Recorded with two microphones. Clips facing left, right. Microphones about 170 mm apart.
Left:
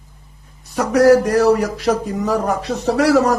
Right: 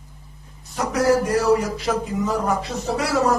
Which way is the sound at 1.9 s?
40° left (ahead or behind).